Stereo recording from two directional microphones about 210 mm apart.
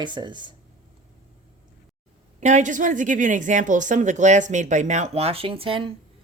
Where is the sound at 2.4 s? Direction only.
35° right (ahead or behind).